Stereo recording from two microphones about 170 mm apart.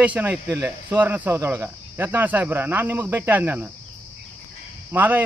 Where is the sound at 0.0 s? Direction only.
10° right (ahead or behind).